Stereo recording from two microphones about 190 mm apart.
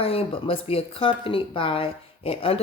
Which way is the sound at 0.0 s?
30° left (ahead or behind).